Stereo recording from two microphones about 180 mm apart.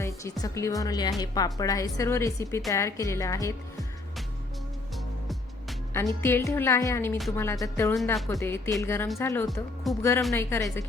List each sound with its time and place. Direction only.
0.0 s a woman's voice: 15° left (ahead or behind)
5.9 s a woman's voice: 15° left (ahead or behind)